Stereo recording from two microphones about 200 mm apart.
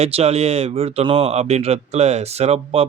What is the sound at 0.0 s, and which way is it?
Speech, 30° right (ahead or behind).